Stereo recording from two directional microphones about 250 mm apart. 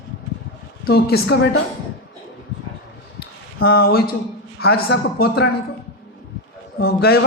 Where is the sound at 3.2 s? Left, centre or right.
Left.